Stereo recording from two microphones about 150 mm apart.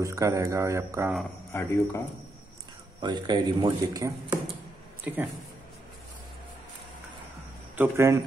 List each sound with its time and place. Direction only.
0.0 s speech: 20° right (ahead or behind)
1.5 s speech: 15° left (ahead or behind)
3.0 s speech: 30° right (ahead or behind)
5.0 s speech: 10° right (ahead or behind)
7.7 s speech: 15° right (ahead or behind)